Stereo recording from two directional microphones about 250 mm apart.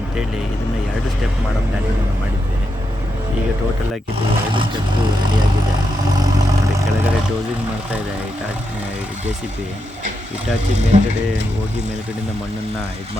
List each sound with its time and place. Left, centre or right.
10.9 s speech: right